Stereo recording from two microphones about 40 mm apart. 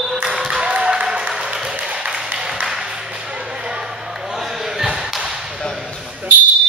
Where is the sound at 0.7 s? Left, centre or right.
Right.